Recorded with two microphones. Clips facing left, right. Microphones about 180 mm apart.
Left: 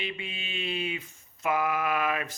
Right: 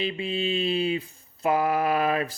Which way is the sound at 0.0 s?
35° right (ahead or behind).